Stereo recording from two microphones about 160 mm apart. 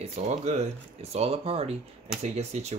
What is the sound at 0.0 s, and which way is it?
Speech, 40° right (ahead or behind).